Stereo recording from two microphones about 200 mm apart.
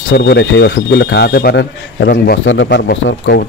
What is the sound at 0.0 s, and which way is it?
Speech, 65° left (ahead or behind).